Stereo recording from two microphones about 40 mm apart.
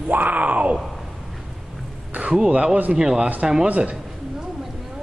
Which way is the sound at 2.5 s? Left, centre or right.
Right.